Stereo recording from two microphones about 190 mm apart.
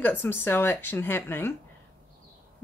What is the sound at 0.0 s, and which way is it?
Speech, 10° left (ahead or behind).